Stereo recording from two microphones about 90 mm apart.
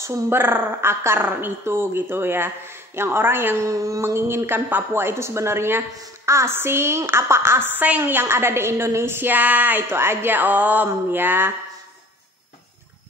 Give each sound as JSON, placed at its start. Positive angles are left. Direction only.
{"t": 0.0, "sound": "a woman's voice", "side_deg": -30}